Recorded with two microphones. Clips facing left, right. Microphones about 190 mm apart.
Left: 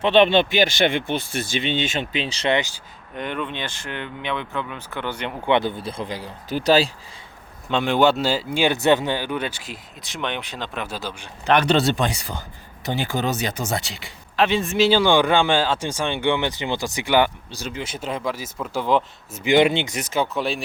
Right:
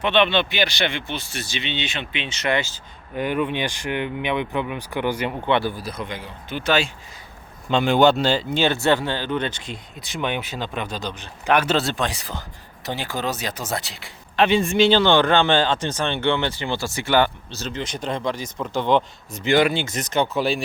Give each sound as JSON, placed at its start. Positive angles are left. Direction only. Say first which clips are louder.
{"t": 0.0, "sound": "speech", "louder": "left 4 dB", "side_deg": 40}
{"t": 2.6, "sound": "speech", "louder": "left 1 dB", "side_deg": 15}
{"t": 3.2, "sound": "speech", "louder": "right 5 dB", "side_deg": -10}
{"t": 5.5, "sound": "speech", "louder": "left 3 dB", "side_deg": 20}
{"t": 7.7, "sound": "speech", "louder": "right 2 dB", "side_deg": 0}
{"t": 11.4, "sound": "speech", "louder": "left 2 dB", "side_deg": -5}
{"t": 19.5, "sound": "speech", "louder": "left 2 dB", "side_deg": 20}